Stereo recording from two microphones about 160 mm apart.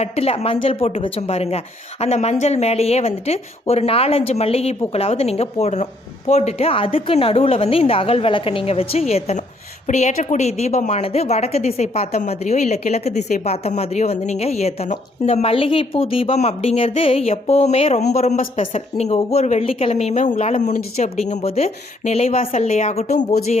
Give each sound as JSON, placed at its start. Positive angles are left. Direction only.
{"t": 0.0, "sound": "a woman's voice", "side_deg": 40}